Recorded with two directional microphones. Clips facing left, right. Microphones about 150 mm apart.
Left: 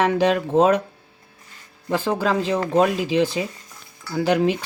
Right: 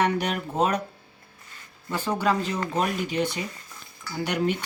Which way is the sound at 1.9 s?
90° left.